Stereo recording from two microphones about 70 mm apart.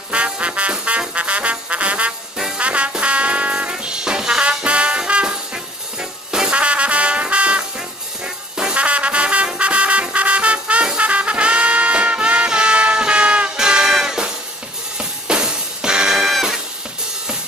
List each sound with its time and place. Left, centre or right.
0.1 s music: centre